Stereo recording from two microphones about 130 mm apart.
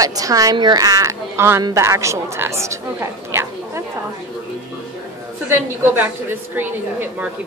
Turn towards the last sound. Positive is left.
turn(degrees=-15)  # may be behind; listen again after turning